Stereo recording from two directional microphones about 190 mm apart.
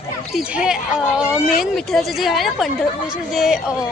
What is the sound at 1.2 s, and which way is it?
A woman's voice, centre (ahead or behind).